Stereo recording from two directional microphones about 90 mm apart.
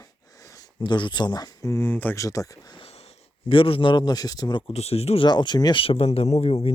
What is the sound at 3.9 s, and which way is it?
Speech, 50° left (ahead or behind).